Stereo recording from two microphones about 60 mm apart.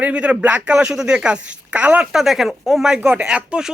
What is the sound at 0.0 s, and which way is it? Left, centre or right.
Speech, right.